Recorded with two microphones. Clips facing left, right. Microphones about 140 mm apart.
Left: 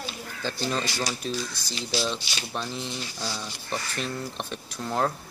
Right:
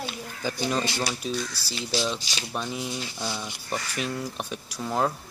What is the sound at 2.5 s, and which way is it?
Speech, 10° right (ahead or behind).